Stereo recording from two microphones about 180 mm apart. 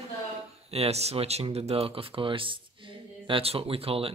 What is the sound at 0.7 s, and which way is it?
Speech, 35° right (ahead or behind).